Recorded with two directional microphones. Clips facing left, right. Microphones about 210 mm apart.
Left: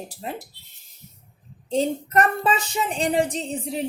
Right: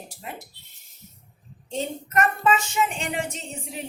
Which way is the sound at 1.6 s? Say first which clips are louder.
Left 7 dB; 35° left (ahead or behind).